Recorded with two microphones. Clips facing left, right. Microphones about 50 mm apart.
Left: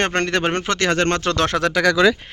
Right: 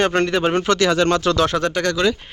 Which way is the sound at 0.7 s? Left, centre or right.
Left.